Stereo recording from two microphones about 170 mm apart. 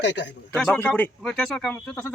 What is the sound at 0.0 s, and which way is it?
Speech, 90° left.